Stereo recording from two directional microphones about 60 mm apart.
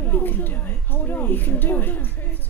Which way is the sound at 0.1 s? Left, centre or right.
Left.